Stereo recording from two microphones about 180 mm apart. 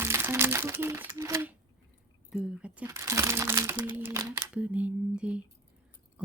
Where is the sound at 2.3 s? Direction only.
5° right (ahead or behind).